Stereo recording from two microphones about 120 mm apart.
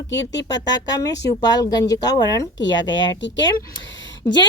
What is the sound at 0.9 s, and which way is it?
A woman's voice, 35° left (ahead or behind).